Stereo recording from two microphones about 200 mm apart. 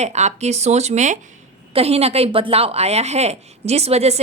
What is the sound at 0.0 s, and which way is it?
Speech, 35° right (ahead or behind).